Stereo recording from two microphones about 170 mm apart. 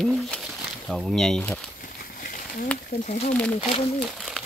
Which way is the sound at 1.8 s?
60° left (ahead or behind).